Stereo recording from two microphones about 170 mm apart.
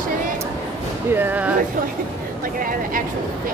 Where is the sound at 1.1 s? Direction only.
10° right (ahead or behind).